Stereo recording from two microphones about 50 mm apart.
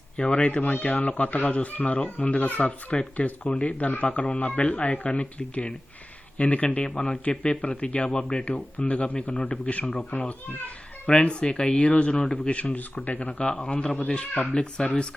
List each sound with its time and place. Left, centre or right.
0.2 s speech: left
13.5 s speech: centre